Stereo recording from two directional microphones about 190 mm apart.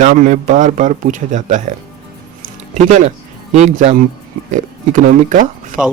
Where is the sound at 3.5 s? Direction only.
35° right (ahead or behind).